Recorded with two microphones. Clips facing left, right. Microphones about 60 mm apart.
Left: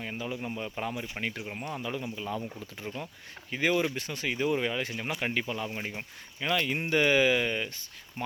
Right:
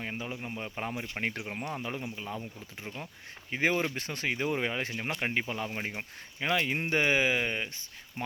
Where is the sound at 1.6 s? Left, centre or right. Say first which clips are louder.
Left 2 dB; right.